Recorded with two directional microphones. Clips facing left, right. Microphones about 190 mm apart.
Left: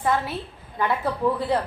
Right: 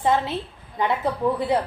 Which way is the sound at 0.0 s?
25° right (ahead or behind).